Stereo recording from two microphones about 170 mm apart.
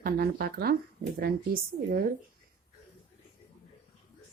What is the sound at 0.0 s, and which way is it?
Speech, 65° right (ahead or behind).